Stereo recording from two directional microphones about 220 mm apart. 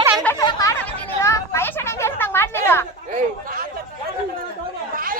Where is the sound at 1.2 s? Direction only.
15° left (ahead or behind).